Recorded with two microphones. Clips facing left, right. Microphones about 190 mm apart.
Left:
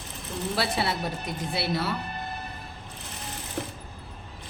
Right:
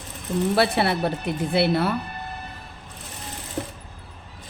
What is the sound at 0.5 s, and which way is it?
A woman's voice, 60° right (ahead or behind).